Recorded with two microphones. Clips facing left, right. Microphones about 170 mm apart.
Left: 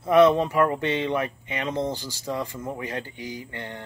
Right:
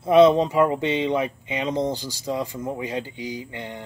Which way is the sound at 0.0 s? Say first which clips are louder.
Right 2 dB; 15° right (ahead or behind).